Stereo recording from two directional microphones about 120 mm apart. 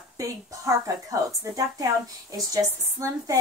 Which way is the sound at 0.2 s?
25° right (ahead or behind).